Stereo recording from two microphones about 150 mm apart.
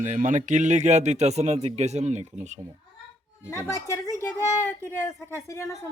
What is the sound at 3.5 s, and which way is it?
A woman's voice, 20° left (ahead or behind).